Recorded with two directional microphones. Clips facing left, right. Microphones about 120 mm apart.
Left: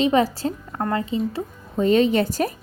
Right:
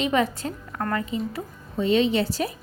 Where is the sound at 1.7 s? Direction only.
45° left (ahead or behind).